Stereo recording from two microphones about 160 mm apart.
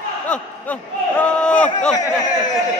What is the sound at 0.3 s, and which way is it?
A man's voice, 10° left (ahead or behind).